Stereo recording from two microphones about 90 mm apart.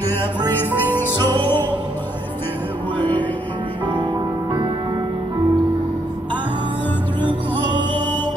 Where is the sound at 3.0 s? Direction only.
60° right (ahead or behind).